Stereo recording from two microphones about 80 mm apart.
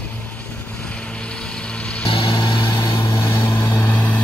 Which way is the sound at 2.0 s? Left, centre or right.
Left.